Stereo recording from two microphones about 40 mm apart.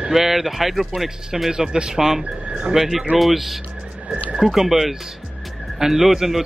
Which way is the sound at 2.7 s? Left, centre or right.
Centre.